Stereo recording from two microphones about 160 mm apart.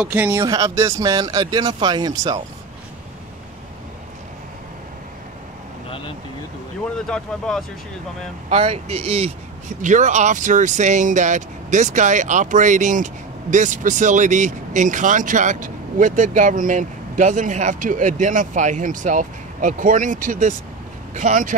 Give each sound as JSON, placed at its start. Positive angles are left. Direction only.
{"t": 0.0, "sound": "speech", "side_deg": -10}
{"t": 5.9, "sound": "vehicle", "side_deg": 35}
{"t": 7.1, "sound": "speech", "side_deg": 5}
{"t": 8.5, "sound": "speech", "side_deg": -40}